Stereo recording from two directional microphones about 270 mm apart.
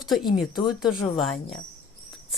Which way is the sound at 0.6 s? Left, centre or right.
Centre.